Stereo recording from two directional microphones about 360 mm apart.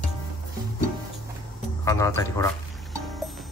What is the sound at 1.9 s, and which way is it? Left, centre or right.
Speech, centre.